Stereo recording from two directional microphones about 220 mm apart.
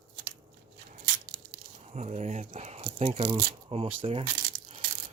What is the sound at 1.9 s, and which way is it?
Speech, 30° right (ahead or behind).